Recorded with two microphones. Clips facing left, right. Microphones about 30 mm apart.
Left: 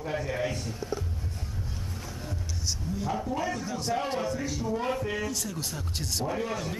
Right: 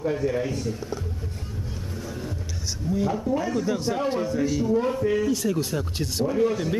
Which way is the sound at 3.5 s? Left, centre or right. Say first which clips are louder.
Right 6 dB; centre.